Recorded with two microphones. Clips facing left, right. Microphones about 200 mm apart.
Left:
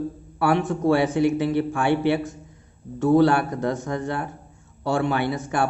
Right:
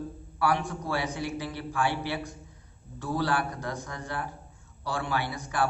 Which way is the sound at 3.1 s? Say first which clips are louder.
Left 11 dB; 25° left (ahead or behind).